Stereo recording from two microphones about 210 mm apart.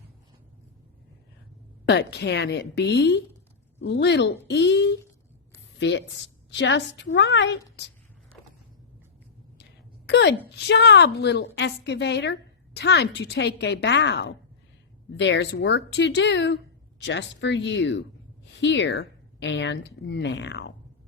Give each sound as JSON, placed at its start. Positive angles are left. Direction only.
{"t": 1.9, "sound": "a woman's voice", "side_deg": 55}
{"t": 10.1, "sound": "a woman's voice", "side_deg": 55}